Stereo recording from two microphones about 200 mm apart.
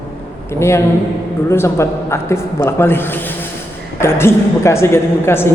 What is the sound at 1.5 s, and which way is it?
Speech, 15° left (ahead or behind).